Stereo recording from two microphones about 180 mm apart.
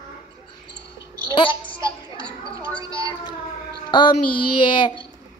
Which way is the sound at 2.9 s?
20° right (ahead or behind).